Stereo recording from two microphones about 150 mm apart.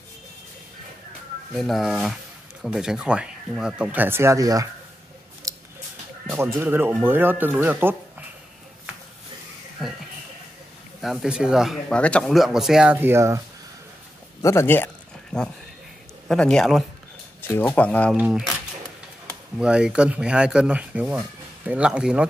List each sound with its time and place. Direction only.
1.5 s speech: centre (ahead or behind); by 4.6 s 25° right (ahead or behind)
5.5 s scissors: 20° right (ahead or behind)
6.2 s speech: 15° right (ahead or behind)
11.0 s speech: centre (ahead or behind); by 13.4 s 20° right (ahead or behind)
14.4 s speech: 20° left (ahead or behind)
15.3 s speech: 5° left (ahead or behind)
17.4 s speech: 15° left (ahead or behind)
18.1 s speech: 5° right (ahead or behind)
19.6 s speech: 5° right (ahead or behind)